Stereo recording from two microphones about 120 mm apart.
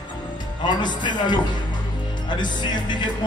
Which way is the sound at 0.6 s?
40° left (ahead or behind).